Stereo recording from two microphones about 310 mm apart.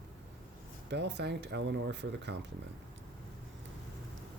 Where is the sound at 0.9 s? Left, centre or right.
Right.